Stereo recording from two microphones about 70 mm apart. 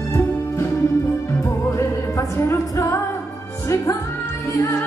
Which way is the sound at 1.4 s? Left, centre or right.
Left.